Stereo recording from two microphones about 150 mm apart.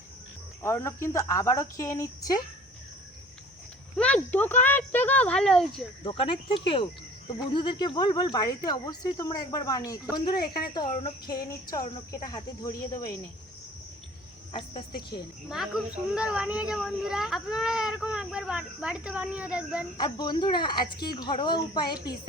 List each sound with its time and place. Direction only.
0.6 s speech: 15° left (ahead or behind)
3.9 s speech: 10° left (ahead or behind)
6.0 s speech: 35° left (ahead or behind)
14.5 s speech: 35° left (ahead or behind)
15.4 s a child's voice: 5° right (ahead or behind)
20.0 s speech: 30° left (ahead or behind)